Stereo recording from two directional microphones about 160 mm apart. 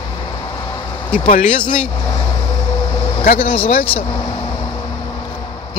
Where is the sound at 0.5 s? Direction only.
20° left (ahead or behind).